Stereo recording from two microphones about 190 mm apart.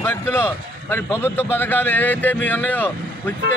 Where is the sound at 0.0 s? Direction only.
10° left (ahead or behind).